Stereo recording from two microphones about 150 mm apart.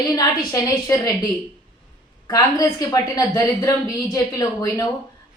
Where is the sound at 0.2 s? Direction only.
25° left (ahead or behind).